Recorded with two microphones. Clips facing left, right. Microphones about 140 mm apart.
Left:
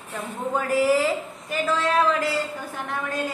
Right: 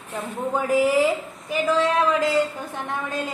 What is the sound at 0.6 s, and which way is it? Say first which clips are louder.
Speech: right 1 dB; 15° right (ahead or behind).